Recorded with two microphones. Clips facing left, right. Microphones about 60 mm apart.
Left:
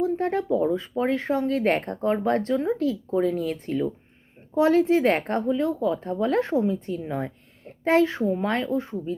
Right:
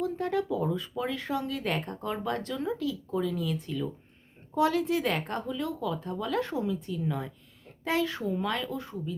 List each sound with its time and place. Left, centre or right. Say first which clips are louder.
0.0 s speech: left 5 dB; left
4.5 s speech: left 7 dB; left